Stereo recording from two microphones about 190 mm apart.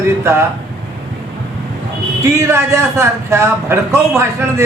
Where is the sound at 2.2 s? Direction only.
15° right (ahead or behind).